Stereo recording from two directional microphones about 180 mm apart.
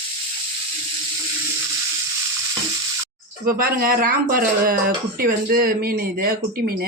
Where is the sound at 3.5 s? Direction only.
55° right (ahead or behind).